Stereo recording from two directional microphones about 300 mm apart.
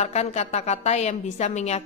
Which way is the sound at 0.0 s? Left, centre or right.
Left.